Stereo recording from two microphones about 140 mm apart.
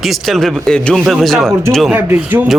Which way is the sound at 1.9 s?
15° right (ahead or behind).